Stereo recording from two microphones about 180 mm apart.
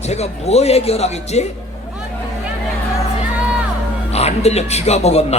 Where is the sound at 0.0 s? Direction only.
35° left (ahead or behind).